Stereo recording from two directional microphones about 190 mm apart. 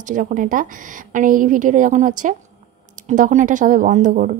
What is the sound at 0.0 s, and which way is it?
Speech, 40° right (ahead or behind).